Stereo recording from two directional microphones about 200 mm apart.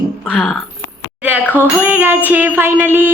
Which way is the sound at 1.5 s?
10° right (ahead or behind).